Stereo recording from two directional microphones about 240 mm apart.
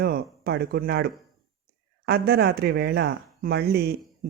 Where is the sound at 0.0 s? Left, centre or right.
Right.